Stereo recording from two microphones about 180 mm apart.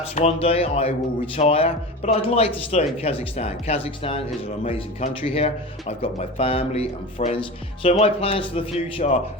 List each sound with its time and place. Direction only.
0.2 s speech: 35° left (ahead or behind)